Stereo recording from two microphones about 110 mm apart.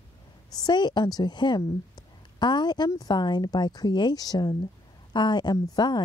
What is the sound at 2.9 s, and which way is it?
Speech, 35° left (ahead or behind).